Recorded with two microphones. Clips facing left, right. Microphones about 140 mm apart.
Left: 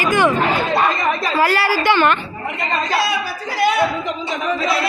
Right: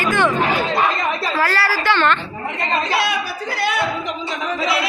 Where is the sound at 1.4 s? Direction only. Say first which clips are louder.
Left 4 dB; 15° left (ahead or behind).